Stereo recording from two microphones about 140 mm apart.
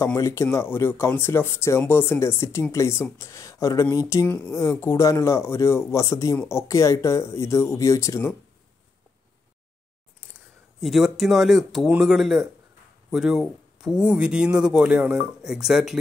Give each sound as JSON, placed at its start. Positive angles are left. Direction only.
{"t": 0.0, "sound": "speech", "side_deg": 20}
{"t": 10.8, "sound": "speech", "side_deg": 0}